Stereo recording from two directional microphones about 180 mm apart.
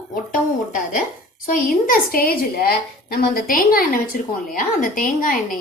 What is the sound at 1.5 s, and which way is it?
A woman's voice, 55° left (ahead or behind).